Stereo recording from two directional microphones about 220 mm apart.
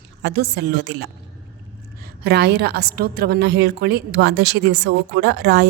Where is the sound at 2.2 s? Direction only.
50° right (ahead or behind).